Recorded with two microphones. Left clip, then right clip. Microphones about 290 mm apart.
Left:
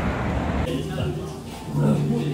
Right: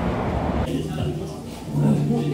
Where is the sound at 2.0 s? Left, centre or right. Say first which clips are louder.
Right 2 dB; centre.